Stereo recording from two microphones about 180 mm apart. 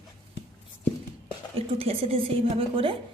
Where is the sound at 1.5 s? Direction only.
30° right (ahead or behind).